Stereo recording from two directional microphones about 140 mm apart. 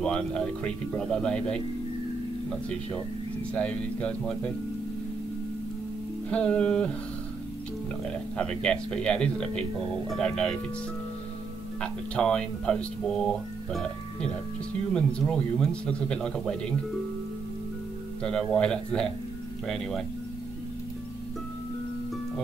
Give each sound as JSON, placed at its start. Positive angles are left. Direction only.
{"t": 0.0, "sound": "speech", "side_deg": 5}
{"t": 3.5, "sound": "speech", "side_deg": 10}
{"t": 6.3, "sound": "speech", "side_deg": 10}
{"t": 8.4, "sound": "speech", "side_deg": 5}
{"t": 11.8, "sound": "speech", "side_deg": 5}
{"t": 18.2, "sound": "speech", "side_deg": 5}